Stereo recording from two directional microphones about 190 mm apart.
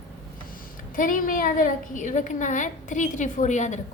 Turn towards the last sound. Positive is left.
turn(degrees=40)  # may be behind; listen again after turning